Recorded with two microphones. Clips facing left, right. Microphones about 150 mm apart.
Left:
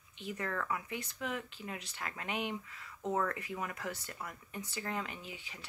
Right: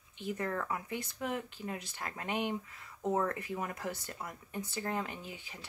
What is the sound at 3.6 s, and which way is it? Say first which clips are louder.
Speech: right 2 dB; 40° right (ahead or behind).